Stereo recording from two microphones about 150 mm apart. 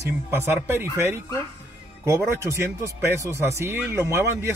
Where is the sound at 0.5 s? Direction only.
15° right (ahead or behind).